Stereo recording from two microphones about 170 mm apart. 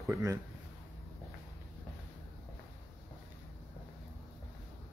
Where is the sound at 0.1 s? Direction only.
15° right (ahead or behind).